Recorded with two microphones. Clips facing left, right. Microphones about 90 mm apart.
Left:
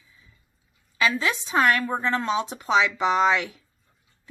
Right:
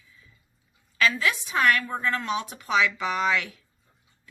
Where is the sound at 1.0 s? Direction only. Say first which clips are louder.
Even; 20° left (ahead or behind).